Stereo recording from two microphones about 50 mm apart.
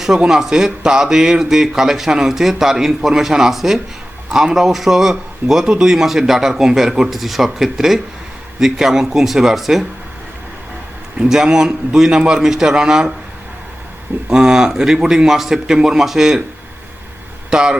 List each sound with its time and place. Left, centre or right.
0.3 s speech: centre
11.3 s speech: centre
14.3 s speech: centre
17.5 s a man's voice: centre